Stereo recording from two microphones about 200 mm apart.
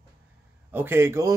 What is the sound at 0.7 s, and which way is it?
Speech, 10° right (ahead or behind).